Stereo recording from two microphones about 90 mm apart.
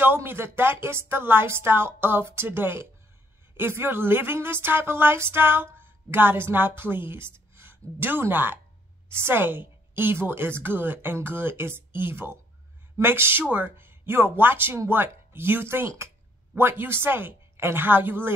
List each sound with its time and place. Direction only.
0.0 s a woman's voice: 25° right (ahead or behind)